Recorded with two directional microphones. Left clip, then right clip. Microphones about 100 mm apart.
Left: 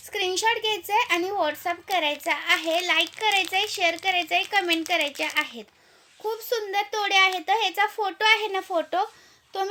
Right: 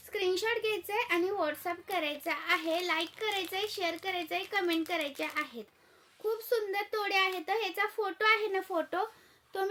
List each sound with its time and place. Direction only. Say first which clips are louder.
0.1 s a woman's voice: left 7 dB; 45° right (ahead or behind)